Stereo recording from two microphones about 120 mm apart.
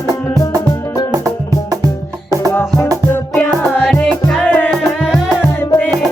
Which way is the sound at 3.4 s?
10° left (ahead or behind).